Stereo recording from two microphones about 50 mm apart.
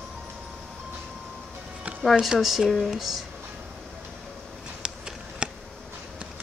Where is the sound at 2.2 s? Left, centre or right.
Centre.